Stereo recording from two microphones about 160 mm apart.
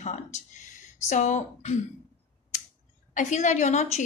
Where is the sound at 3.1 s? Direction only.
50° left (ahead or behind).